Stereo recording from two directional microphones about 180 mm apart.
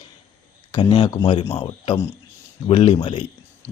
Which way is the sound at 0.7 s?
25° left (ahead or behind).